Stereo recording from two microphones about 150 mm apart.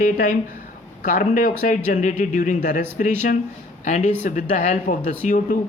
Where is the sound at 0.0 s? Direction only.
60° left (ahead or behind).